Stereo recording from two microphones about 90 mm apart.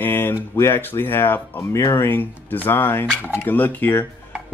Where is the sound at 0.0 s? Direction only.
25° left (ahead or behind).